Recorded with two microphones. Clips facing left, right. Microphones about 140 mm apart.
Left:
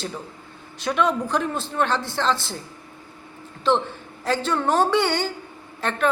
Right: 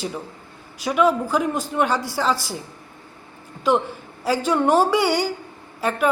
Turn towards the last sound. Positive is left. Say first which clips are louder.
# right 3 dB
turn(degrees=-10)  # may be behind; listen again after turning